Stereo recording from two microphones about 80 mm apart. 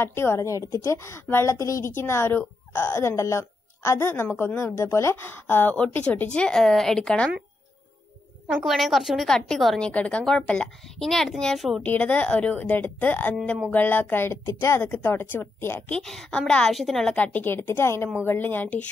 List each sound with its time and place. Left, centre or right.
0.0 s a woman's voice: left; by 7.2 s centre
8.6 s a woman's voice: centre
11.8 s a woman's voice: centre
15.9 s a woman's voice: centre
17.1 s a woman's voice: left